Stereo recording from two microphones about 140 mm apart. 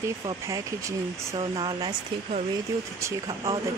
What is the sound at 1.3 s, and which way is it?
Speech, 35° right (ahead or behind).